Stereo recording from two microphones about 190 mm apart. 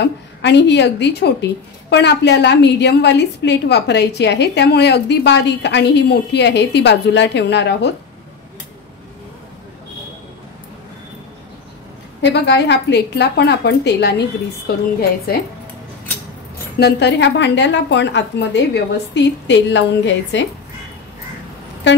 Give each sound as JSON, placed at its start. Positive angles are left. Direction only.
{"t": 0.0, "sound": "a woman's voice", "side_deg": 65}
{"t": 12.2, "sound": "a woman's voice", "side_deg": 65}
{"t": 14.7, "sound": "a woman's voice", "side_deg": 50}
{"t": 16.8, "sound": "a woman's voice", "side_deg": 65}